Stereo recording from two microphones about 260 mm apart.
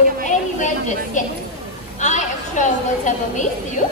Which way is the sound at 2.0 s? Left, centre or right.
Left.